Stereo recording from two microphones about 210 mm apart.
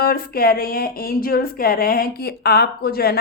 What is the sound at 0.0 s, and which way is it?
A woman's voice, 45° left (ahead or behind).